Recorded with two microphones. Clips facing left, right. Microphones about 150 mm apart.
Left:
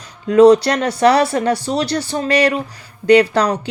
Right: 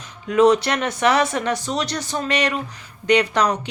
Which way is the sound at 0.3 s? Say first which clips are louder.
Left 6 dB; 30° left (ahead or behind).